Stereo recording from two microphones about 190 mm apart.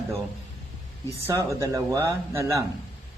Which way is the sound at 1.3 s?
15° right (ahead or behind).